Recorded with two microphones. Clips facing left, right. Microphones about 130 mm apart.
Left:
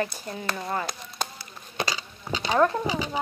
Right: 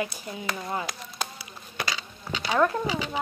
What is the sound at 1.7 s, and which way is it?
Insect, 25° left (ahead or behind).